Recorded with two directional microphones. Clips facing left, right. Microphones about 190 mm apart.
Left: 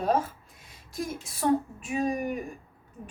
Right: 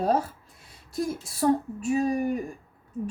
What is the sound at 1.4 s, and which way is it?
Speech, 35° right (ahead or behind).